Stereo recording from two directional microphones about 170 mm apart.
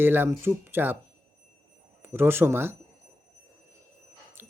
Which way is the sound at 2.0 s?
15° right (ahead or behind).